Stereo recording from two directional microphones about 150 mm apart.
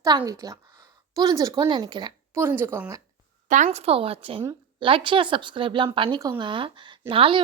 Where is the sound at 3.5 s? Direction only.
55° right (ahead or behind).